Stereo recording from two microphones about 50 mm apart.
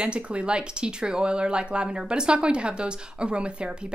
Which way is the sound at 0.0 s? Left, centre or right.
Right.